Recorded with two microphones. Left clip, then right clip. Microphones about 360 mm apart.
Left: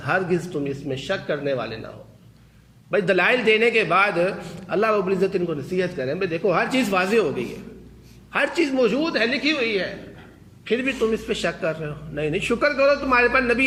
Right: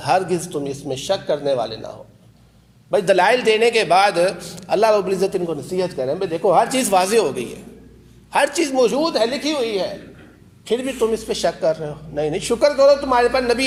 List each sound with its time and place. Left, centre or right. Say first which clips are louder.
0.0 s a man's voice: right 4 dB; right
2.9 s a man's voice: right 4 dB; right
8.3 s a man's voice: right 4 dB; right